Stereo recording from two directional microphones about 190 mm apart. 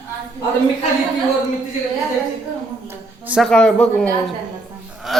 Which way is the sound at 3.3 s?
Centre (ahead or behind).